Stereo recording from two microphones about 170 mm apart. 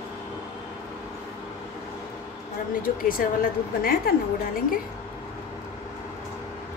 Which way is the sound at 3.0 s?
55° left (ahead or behind).